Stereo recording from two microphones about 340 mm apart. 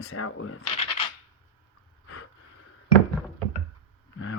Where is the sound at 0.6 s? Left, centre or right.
Centre.